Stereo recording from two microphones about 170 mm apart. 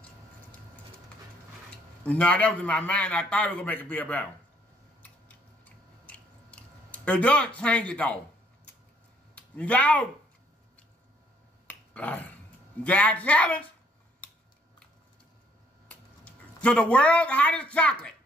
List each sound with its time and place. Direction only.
2.0 s a man's voice: 5° left (ahead or behind)
6.0 s chewing: 10° left (ahead or behind)
9.3 s speech: 10° left (ahead or behind)
11.6 s finger snapping: 10° left (ahead or behind)
12.8 s a man's voice: 10° left (ahead or behind)
16.6 s a man's voice: 5° left (ahead or behind)